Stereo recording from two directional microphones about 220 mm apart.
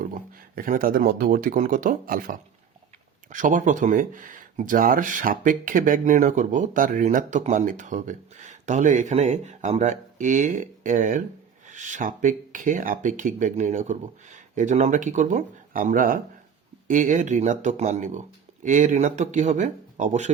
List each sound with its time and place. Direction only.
0.0 s speech: 40° right (ahead or behind)